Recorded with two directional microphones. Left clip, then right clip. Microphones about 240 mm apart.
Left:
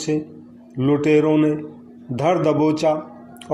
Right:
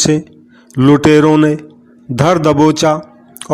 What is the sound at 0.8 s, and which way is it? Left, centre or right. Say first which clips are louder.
A man's voice: right 8 dB; right.